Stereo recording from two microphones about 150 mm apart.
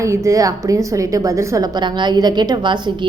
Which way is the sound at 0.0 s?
20° right (ahead or behind).